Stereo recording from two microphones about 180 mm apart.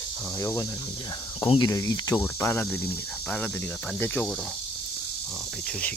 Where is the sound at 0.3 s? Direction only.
15° left (ahead or behind).